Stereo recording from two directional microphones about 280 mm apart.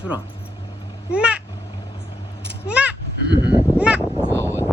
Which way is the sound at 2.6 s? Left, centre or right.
Centre.